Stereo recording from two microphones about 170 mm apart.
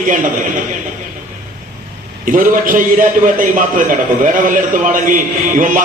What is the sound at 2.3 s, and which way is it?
A man's voice, 55° right (ahead or behind).